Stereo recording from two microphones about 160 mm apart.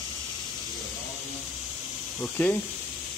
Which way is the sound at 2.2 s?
10° left (ahead or behind).